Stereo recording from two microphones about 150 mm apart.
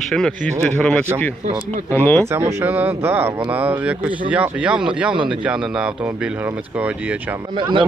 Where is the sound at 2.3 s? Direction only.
15° right (ahead or behind).